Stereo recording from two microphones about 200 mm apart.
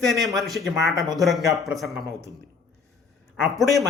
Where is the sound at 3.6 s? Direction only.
Centre (ahead or behind).